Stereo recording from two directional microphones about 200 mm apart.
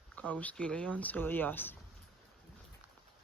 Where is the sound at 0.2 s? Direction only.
5° left (ahead or behind).